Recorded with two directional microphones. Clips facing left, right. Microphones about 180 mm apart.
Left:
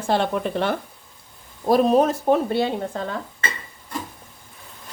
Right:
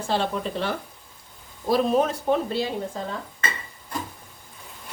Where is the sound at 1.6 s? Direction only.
45° left (ahead or behind).